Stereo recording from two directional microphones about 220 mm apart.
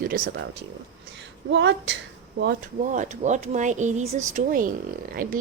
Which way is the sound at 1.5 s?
55° right (ahead or behind).